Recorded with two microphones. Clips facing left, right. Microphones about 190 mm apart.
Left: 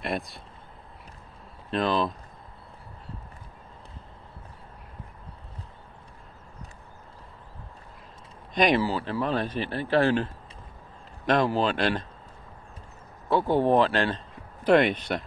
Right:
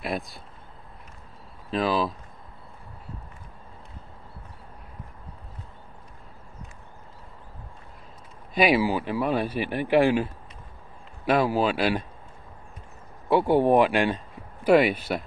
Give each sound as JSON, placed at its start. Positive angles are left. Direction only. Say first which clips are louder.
{"t": 0.0, "sound": "speech", "louder": "even", "side_deg": 0}
{"t": 1.7, "sound": "speech", "louder": "right 1 dB", "side_deg": -5}
{"t": 8.5, "sound": "speech", "louder": "right 2 dB", "side_deg": -5}
{"t": 13.3, "sound": "speech", "louder": "right 2 dB", "side_deg": -10}